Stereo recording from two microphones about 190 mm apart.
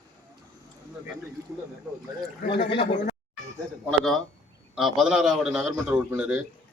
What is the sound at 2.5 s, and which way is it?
Speech, 65° left (ahead or behind).